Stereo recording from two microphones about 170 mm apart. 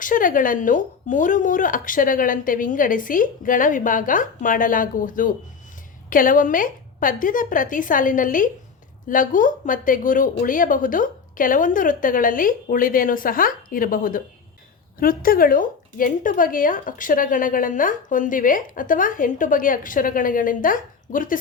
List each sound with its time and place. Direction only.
0.0 s speech: 50° left (ahead or behind)